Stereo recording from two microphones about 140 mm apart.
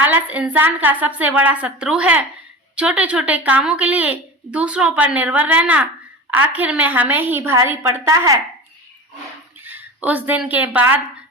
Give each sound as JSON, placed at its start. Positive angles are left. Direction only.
{"t": 0.0, "sound": "a woman's voice", "side_deg": -10}
{"t": 9.6, "sound": "speech", "side_deg": -10}